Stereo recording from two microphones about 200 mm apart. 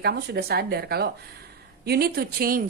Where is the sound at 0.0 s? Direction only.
50° right (ahead or behind).